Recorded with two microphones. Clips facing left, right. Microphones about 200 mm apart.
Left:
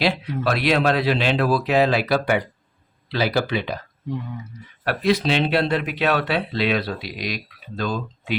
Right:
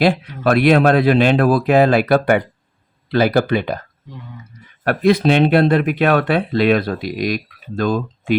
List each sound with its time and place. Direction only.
0.0 s speech: 50° right (ahead or behind)
4.8 s speech: 50° right (ahead or behind)